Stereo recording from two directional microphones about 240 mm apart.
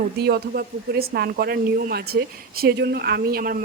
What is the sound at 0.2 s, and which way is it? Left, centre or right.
Speech, right.